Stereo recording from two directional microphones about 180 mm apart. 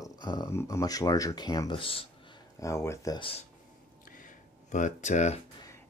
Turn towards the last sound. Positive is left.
turn(degrees=40)  # may be behind; listen again after turning